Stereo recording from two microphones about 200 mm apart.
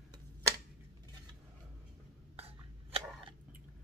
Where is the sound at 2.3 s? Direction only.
30° right (ahead or behind).